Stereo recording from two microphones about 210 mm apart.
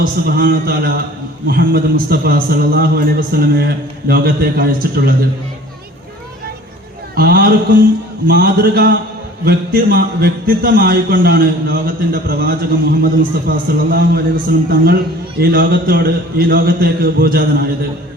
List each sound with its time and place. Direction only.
0.0 s a man's voice: 45° right (ahead or behind)
7.2 s a man's voice: 45° right (ahead or behind)